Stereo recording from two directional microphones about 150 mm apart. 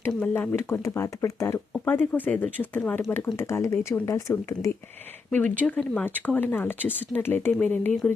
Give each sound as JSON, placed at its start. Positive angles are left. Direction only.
{"t": 0.0, "sound": "speech", "side_deg": 15}
{"t": 5.6, "sound": "speech", "side_deg": 10}